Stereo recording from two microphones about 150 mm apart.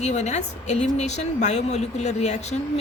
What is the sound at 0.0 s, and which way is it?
A woman's voice, 50° left (ahead or behind).